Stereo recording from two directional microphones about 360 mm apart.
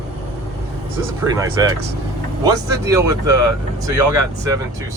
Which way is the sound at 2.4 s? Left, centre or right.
Centre.